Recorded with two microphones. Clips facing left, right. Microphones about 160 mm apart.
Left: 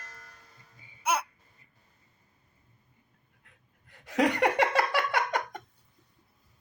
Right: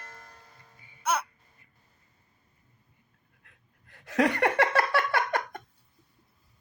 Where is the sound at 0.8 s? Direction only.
10° left (ahead or behind).